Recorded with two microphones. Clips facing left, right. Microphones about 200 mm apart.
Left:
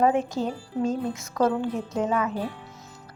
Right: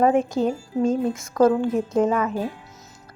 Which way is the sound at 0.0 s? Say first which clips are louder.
Right 4 dB; 50° right (ahead or behind).